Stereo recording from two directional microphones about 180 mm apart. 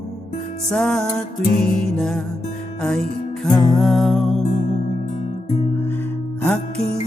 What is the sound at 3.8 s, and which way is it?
Music, centre (ahead or behind).